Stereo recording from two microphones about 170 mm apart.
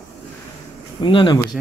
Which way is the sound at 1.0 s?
30° left (ahead or behind).